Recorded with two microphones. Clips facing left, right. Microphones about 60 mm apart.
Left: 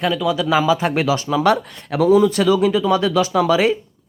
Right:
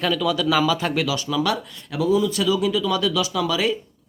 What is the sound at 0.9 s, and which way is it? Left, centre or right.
Speech, left.